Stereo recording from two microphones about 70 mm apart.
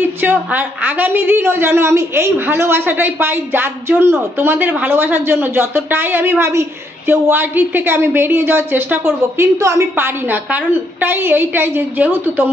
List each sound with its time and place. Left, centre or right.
0.0 s speech: right
9.6 s a woman's voice: right
9.9 s a woman's voice: right